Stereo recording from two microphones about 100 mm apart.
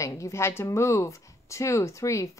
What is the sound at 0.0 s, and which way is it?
A woman's voice, 30° left (ahead or behind).